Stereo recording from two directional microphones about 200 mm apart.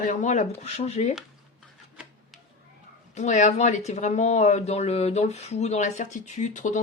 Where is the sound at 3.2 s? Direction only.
35° left (ahead or behind).